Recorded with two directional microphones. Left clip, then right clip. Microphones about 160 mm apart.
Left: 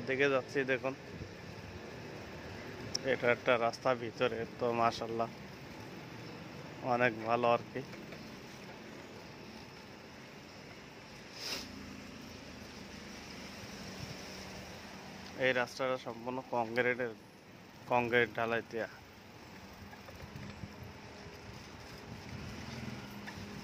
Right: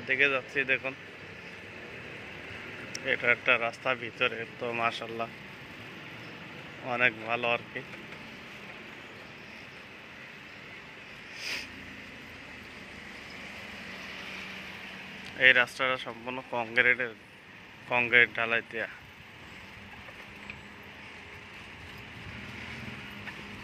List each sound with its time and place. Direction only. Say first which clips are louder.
0.1 s speech: right 5 dB; 35° left (ahead or behind)
2.9 s speech: right 4 dB; 30° left (ahead or behind)
6.9 s speech: right 3 dB; 35° left (ahead or behind)
11.3 s a sound: right 6 dB; 35° left (ahead or behind)
15.3 s speech: right 10 dB; 10° left (ahead or behind)